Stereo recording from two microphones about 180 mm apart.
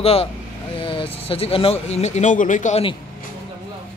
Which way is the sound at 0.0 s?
35° left (ahead or behind).